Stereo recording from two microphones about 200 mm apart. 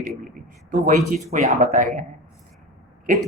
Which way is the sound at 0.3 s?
40° right (ahead or behind).